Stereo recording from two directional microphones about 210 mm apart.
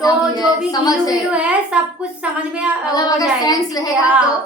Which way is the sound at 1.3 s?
5° right (ahead or behind).